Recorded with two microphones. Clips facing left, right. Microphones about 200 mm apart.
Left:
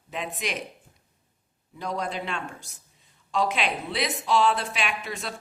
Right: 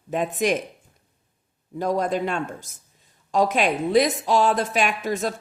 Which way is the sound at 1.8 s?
45° right (ahead or behind).